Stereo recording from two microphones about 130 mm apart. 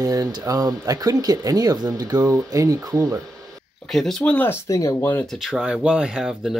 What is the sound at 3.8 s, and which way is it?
Speech, 5° left (ahead or behind).